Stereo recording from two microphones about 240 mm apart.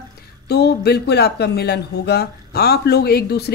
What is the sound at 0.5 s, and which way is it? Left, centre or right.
Speech, left.